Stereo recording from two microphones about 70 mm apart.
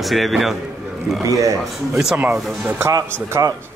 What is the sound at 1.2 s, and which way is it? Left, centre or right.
Speech, right.